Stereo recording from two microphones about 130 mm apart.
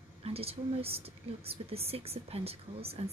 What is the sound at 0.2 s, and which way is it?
A woman's voice, 50° right (ahead or behind).